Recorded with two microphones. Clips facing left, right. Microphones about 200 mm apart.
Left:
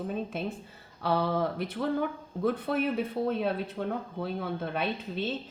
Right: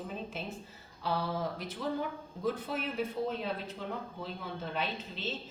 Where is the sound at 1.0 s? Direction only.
60° left (ahead or behind).